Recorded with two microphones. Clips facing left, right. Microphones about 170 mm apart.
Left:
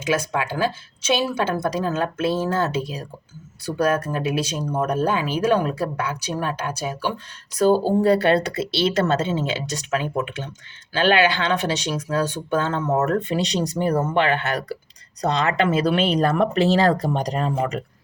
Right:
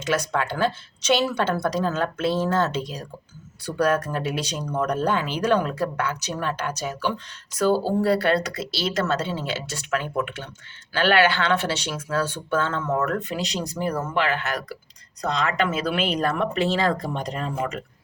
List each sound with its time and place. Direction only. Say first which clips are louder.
0.1 s speech: left 1 dB; 10° left (ahead or behind); by 17.8 s 35° left (ahead or behind)